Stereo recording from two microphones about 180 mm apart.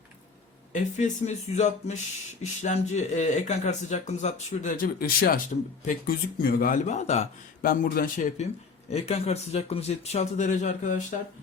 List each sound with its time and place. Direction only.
0.7 s speech: 40° left (ahead or behind)
7.6 s speech: 55° left (ahead or behind)
8.9 s speech: 35° left (ahead or behind)